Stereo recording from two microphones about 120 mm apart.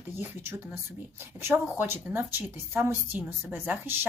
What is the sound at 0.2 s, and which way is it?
A woman's voice, 20° right (ahead or behind).